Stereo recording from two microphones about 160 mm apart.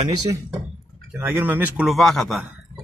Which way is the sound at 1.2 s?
10° right (ahead or behind).